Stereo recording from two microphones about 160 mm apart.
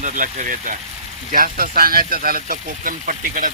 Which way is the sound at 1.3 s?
65° right (ahead or behind).